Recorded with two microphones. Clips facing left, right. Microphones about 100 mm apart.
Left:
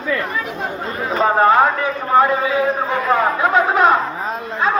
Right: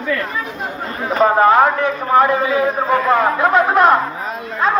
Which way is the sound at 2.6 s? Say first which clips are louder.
Right 2 dB; 5° right (ahead or behind).